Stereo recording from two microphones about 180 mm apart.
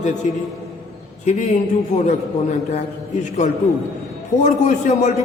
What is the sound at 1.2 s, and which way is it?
A man's voice, 40° left (ahead or behind).